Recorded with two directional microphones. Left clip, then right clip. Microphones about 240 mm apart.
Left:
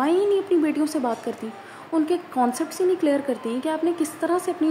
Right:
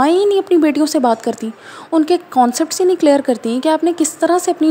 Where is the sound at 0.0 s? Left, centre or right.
Right.